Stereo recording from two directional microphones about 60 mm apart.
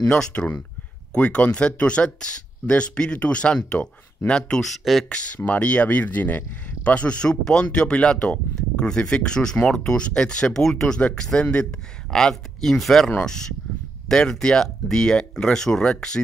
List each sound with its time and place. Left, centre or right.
0.1 s speech: centre
5.1 s speech: left